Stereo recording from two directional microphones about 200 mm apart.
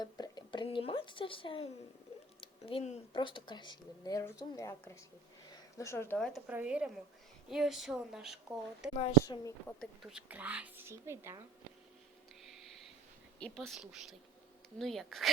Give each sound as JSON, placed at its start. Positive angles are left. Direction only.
{"t": 0.0, "sound": "a woman's voice", "side_deg": 20}
{"t": 9.2, "sound": "speech", "side_deg": 15}
{"t": 9.8, "sound": "speech", "side_deg": 0}
{"t": 13.4, "sound": "a woman's voice", "side_deg": 5}